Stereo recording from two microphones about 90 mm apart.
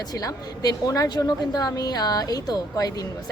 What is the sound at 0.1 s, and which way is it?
A woman's voice, 45° left (ahead or behind).